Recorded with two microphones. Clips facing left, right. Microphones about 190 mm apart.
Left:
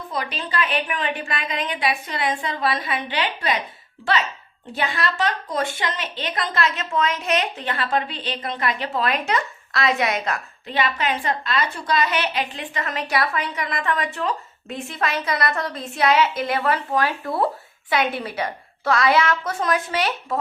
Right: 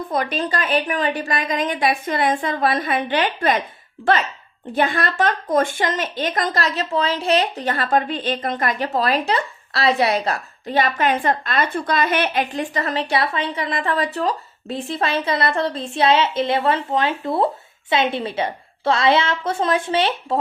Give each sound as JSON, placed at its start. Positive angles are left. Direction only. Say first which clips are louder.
{"t": 0.1, "sound": "a woman's voice", "louder": "right 5 dB", "side_deg": -50}